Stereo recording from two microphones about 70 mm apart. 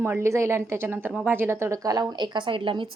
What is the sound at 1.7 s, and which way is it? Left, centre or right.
Speech, right.